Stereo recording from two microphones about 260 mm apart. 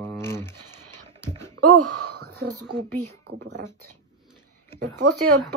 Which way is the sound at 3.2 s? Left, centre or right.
Right.